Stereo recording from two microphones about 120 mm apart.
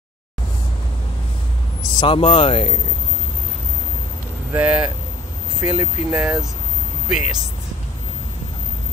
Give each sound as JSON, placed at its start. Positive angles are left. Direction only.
{"t": 2.0, "sound": "speech", "side_deg": 45}
{"t": 4.5, "sound": "speech", "side_deg": -15}